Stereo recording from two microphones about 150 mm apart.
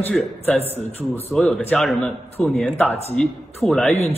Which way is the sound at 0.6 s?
45° left (ahead or behind).